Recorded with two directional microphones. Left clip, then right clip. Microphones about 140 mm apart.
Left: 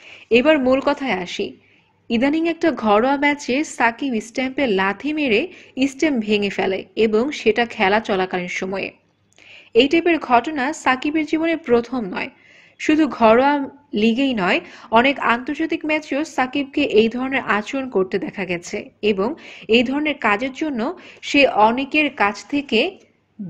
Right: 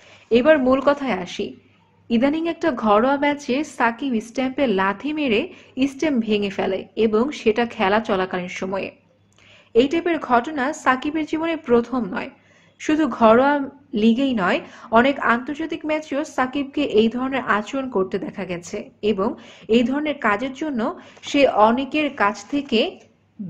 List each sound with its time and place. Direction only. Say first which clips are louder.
0.3 s a woman's voice: left 1 dB; 45° left (ahead or behind)